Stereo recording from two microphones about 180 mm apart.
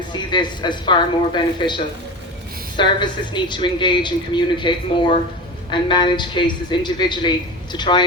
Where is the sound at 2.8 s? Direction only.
25° left (ahead or behind).